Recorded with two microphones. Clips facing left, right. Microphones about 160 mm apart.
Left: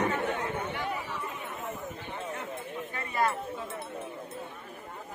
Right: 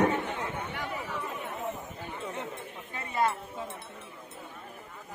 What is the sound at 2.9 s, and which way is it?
Chink, 25° right (ahead or behind).